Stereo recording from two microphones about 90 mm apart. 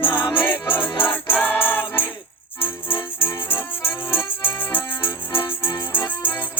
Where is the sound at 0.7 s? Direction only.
25° left (ahead or behind).